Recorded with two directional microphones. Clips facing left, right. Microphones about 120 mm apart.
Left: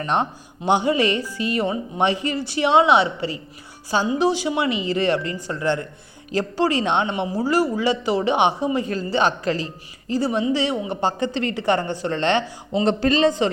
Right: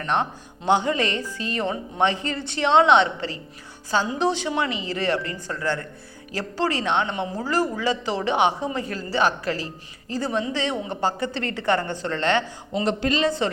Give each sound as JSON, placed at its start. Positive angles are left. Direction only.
{"t": 0.0, "sound": "a woman's voice", "side_deg": 15}